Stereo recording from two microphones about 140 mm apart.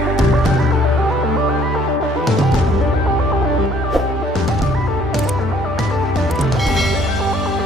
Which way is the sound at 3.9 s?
Centre (ahead or behind).